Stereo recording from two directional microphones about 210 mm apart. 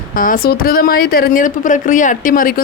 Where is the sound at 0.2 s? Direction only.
45° left (ahead or behind).